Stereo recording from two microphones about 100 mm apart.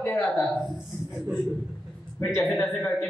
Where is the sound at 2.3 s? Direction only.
5° left (ahead or behind).